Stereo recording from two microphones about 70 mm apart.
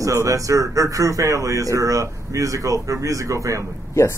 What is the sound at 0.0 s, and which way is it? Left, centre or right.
Speech, right.